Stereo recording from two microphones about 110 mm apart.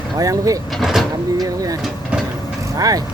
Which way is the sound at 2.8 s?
35° right (ahead or behind).